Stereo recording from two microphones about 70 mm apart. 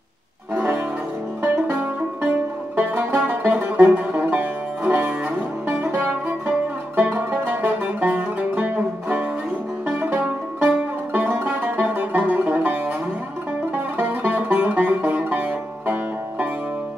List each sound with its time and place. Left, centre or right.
2.7 s music: right
9.8 s banjo: right
11.1 s music: right
13.9 s music: right